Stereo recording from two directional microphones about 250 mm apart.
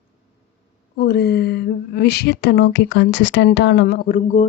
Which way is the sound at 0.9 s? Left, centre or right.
Left.